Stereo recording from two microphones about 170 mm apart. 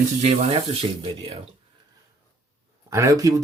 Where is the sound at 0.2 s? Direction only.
40° right (ahead or behind).